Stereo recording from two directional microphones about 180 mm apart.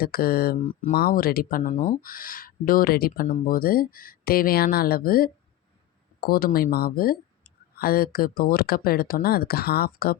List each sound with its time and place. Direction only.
0.0 s speech: 55° left (ahead or behind)